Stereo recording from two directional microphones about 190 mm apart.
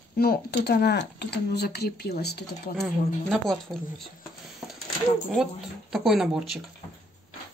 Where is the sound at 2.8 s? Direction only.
Centre (ahead or behind).